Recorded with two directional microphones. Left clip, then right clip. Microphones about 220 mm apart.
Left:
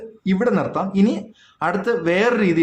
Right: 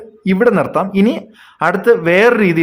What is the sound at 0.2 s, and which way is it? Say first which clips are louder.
Speech: right 8 dB; 35° right (ahead or behind).